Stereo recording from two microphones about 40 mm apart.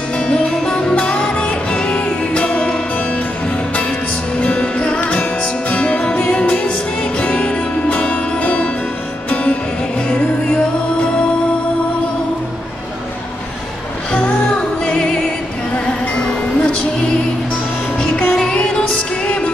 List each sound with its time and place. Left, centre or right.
0.2 s music: left
0.7 s music: left
4.4 s music: left
4.7 s music: left
15.0 s music: left